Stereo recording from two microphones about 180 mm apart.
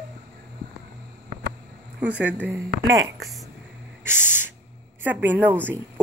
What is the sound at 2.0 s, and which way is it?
Speech, 5° right (ahead or behind).